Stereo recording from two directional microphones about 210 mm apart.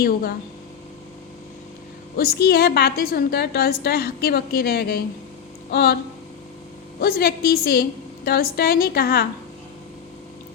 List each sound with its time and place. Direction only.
0.0 s a woman's voice: 45° left (ahead or behind)
2.1 s a woman's voice: 50° left (ahead or behind)
7.0 s a woman's voice: 50° left (ahead or behind)